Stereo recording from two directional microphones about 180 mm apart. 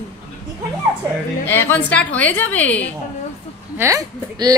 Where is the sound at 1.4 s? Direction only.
10° left (ahead or behind).